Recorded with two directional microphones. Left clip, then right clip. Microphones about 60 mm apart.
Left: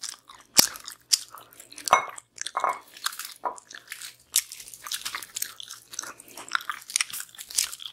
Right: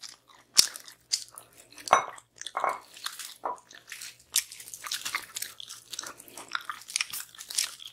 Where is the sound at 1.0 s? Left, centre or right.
Left.